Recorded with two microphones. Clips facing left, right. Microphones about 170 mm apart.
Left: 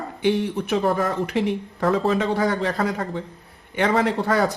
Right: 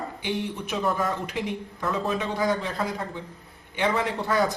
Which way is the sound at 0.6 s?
65° left (ahead or behind).